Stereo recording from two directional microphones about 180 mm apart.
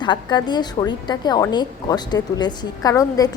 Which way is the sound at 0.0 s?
25° left (ahead or behind).